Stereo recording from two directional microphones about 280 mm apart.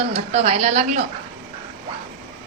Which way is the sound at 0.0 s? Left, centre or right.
Right.